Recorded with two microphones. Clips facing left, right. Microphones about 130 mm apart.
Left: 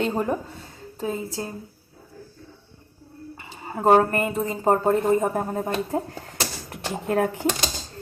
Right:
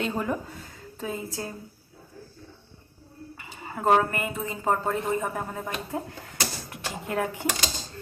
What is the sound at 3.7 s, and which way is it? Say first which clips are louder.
A woman's voice: left 5 dB; 35° left (ahead or behind).